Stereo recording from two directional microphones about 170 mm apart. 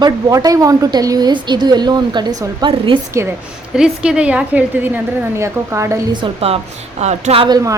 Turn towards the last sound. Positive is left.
turn(degrees=-20)  # may be behind; listen again after turning